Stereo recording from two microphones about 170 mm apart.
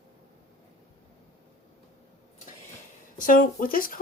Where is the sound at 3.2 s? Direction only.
50° left (ahead or behind).